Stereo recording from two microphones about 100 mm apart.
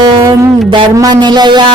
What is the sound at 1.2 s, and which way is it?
Music, 50° right (ahead or behind).